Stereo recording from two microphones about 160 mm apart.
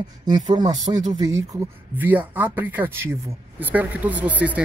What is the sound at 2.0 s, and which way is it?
Speech, 10° right (ahead or behind).